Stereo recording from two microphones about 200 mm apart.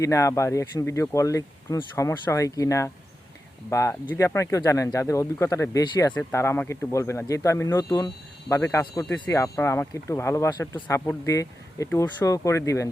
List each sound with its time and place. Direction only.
0.0 s speech: 15° left (ahead or behind)